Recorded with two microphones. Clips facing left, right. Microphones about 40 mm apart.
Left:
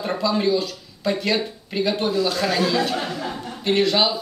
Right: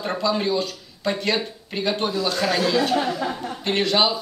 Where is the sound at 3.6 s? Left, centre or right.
Centre.